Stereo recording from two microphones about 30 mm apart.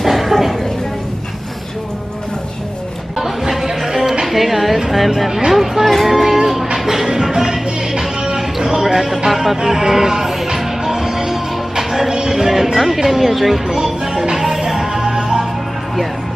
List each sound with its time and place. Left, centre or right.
0.0 s a sound: centre
3.2 s music: centre
4.3 s a sound: centre
5.5 s vehicle: centre
6.9 s music: centre
8.8 s speech: centre
9.3 s music: centre
9.7 s speech: centre
10.6 s music: centre